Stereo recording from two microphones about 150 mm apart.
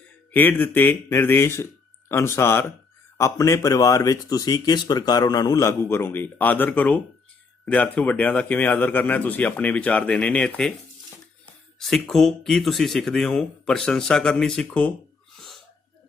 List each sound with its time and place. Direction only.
0.3 s speech: 10° left (ahead or behind)
11.8 s speech: 5° left (ahead or behind)
15.4 s sneeze: centre (ahead or behind)